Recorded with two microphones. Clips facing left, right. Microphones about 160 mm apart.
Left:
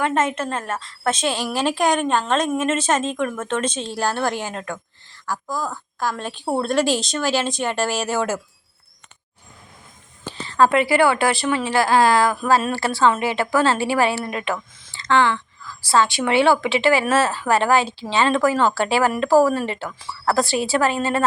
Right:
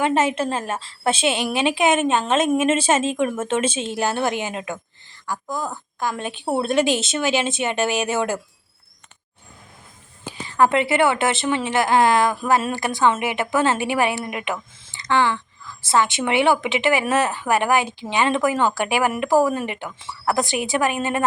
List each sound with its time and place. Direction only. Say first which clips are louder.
0.0 s speech: right 1 dB; 25° right (ahead or behind)
0.3 s speech: right 2 dB; 10° right (ahead or behind)
0.8 s speech: right 1 dB; 30° right (ahead or behind)
1.5 s speech: even; centre (ahead or behind)
5.5 s speech: even; 20° right (ahead or behind)
6.4 s speech: even; 5° right (ahead or behind)
10.2 s a sound: left 1 dB; 10° right (ahead or behind)
10.7 s speech: left 2 dB; 25° right (ahead or behind)